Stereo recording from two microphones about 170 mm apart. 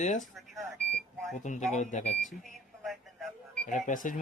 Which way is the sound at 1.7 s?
45° left (ahead or behind).